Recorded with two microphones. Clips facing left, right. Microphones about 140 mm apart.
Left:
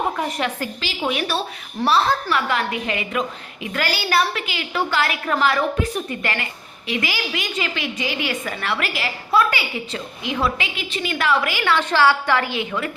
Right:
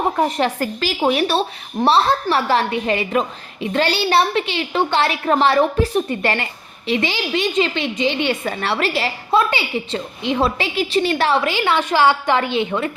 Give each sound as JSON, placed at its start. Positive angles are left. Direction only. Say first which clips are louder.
{"t": 0.2, "sound": "a woman's voice", "louder": "right 6 dB", "side_deg": -35}